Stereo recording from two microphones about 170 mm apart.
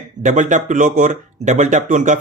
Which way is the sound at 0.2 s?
45° right (ahead or behind).